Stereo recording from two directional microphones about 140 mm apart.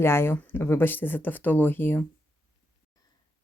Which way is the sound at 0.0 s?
15° left (ahead or behind).